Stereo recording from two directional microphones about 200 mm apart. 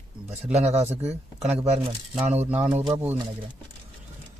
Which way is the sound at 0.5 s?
35° right (ahead or behind).